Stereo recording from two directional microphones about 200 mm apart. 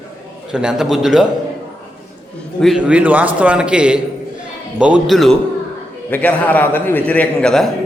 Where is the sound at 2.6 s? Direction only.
5° right (ahead or behind).